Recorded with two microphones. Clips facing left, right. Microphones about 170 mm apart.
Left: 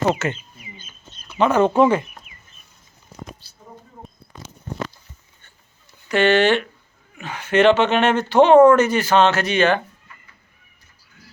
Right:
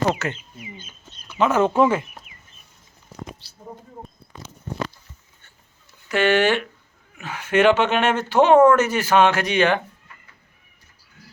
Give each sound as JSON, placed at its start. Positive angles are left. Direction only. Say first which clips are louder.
{"t": 0.1, "sound": "speech", "louder": "left 3 dB", "side_deg": 0}
{"t": 0.3, "sound": "bird", "louder": "right 4 dB", "side_deg": -75}
{"t": 1.4, "sound": "speech", "louder": "left 2 dB", "side_deg": -5}
{"t": 6.1, "sound": "speech", "louder": "left 2 dB", "side_deg": -10}